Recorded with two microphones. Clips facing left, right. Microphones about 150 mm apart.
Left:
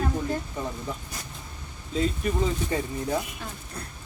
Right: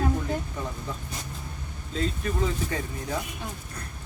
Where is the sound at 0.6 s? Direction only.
20° left (ahead or behind).